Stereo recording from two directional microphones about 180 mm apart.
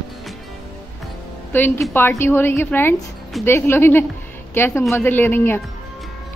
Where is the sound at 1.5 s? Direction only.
10° left (ahead or behind).